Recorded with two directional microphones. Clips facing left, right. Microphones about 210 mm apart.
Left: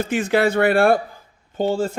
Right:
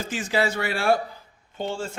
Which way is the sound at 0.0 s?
60° left (ahead or behind).